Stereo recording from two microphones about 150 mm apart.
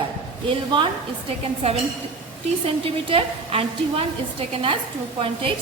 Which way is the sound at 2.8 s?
40° right (ahead or behind).